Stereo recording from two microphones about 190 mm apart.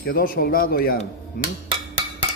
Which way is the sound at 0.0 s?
50° left (ahead or behind).